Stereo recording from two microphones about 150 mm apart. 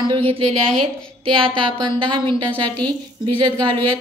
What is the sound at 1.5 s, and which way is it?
Speech, 35° right (ahead or behind).